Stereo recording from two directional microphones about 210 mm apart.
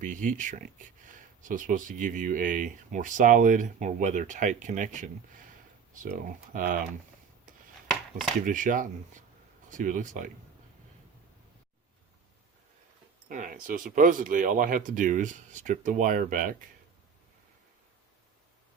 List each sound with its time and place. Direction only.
0.0 s speech: 40° right (ahead or behind)
8.4 s speech: 40° right (ahead or behind)
13.2 s speech: 40° right (ahead or behind)